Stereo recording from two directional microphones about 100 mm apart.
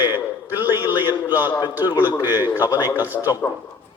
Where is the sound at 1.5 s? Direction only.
45° left (ahead or behind).